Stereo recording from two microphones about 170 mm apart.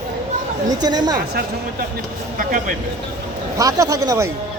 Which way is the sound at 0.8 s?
25° right (ahead or behind).